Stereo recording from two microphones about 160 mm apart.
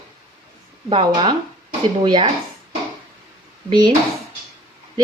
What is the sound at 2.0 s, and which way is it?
Speech, 30° right (ahead or behind).